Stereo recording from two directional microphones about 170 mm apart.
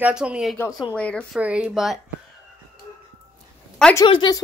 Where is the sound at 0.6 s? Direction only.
20° left (ahead or behind).